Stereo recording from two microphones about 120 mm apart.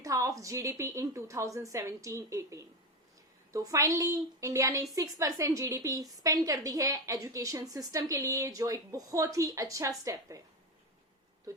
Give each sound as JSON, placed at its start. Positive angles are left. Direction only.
{"t": 0.0, "sound": "a woman's voice", "side_deg": -30}